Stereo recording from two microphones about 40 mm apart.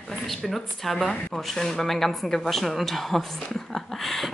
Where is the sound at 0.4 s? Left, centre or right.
Centre.